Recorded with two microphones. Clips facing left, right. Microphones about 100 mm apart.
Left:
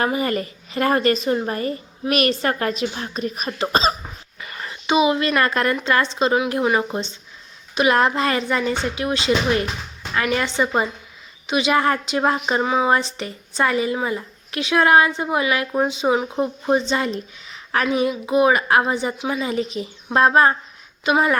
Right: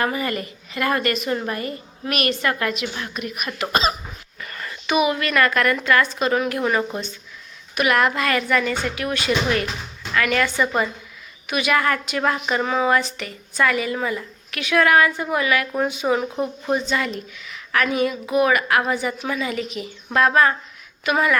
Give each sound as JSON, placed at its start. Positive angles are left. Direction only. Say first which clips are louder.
{"t": 0.0, "sound": "a woman's voice", "louder": "left 2 dB", "side_deg": 30}
{"t": 4.4, "sound": "whispering", "louder": "left 1 dB", "side_deg": 10}
{"t": 4.6, "sound": "a child's voice", "louder": "left 2 dB", "side_deg": 25}
{"t": 12.6, "sound": "speech", "louder": "left 1 dB", "side_deg": 15}
{"t": 12.9, "sound": "a woman's voice", "louder": "left 1 dB", "side_deg": 30}